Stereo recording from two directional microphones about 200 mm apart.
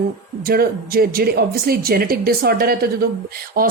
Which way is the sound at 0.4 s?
50° right (ahead or behind).